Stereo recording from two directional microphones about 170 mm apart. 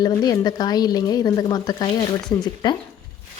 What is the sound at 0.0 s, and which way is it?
Speech, 25° left (ahead or behind).